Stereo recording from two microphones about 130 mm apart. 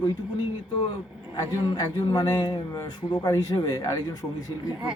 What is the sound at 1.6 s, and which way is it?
A man's voice, 30° left (ahead or behind).